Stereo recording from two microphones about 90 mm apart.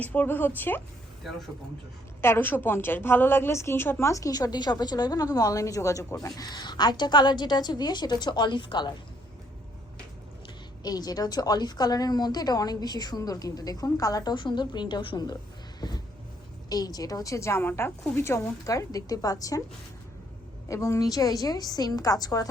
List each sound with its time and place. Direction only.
0.0 s a woman's voice: 20° left (ahead or behind)
2.2 s a woman's voice: 25° left (ahead or behind)
4.1 s a woman's voice: 40° left (ahead or behind); by 8.9 s 60° left (ahead or behind)
10.8 s a woman's voice: 45° left (ahead or behind)
14.3 s a woman's voice: 60° left (ahead or behind); by 19.6 s 40° left (ahead or behind)
20.7 s a woman's voice: 35° left (ahead or behind)